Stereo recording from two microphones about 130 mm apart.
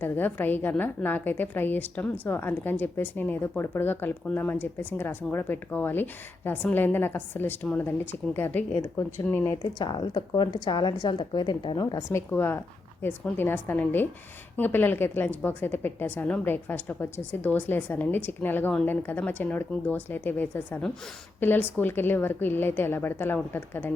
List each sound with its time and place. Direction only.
0.0 s a woman's voice: 15° left (ahead or behind)
9.8 s a woman's voice: 35° left (ahead or behind); by 23.9 s 15° left (ahead or behind)